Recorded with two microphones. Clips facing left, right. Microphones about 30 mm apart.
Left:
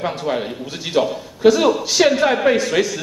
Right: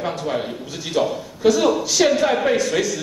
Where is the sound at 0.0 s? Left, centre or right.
Left.